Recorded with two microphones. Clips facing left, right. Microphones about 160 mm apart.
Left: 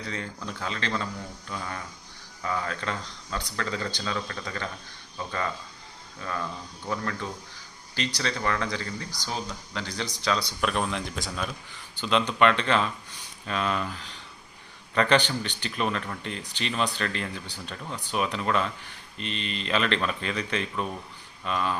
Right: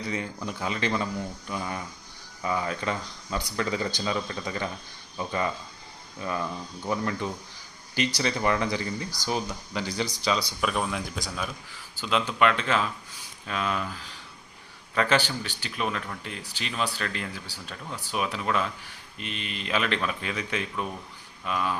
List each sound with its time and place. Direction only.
0.1 s speech: 10° right (ahead or behind)
6.8 s speech: 15° right (ahead or behind)